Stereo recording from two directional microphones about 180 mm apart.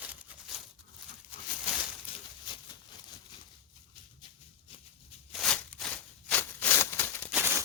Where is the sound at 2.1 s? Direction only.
30° left (ahead or behind).